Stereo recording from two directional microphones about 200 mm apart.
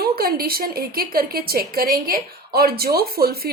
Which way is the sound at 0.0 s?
45° right (ahead or behind).